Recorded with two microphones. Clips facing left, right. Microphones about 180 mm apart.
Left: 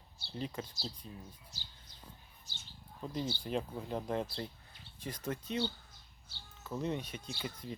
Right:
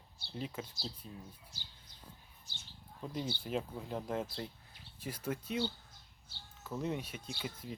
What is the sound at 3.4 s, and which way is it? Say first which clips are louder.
Speech: left 1 dB; 5° right (ahead or behind).